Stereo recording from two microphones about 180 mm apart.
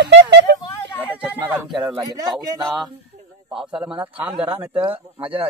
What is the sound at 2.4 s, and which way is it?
Speech, 20° right (ahead or behind).